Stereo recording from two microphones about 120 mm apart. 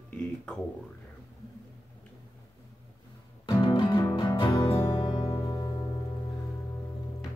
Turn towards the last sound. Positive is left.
turn(degrees=35)  # may be behind; listen again after turning